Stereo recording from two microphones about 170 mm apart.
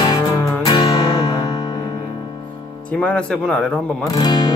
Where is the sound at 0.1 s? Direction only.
20° left (ahead or behind).